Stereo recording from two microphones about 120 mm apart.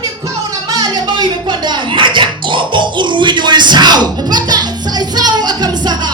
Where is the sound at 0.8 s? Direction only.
35° right (ahead or behind).